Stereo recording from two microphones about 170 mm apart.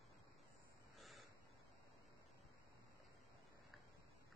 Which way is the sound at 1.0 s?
Centre (ahead or behind).